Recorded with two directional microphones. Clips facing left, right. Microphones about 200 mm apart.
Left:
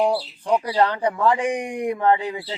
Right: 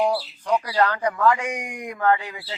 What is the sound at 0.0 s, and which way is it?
Speech, 30° left (ahead or behind).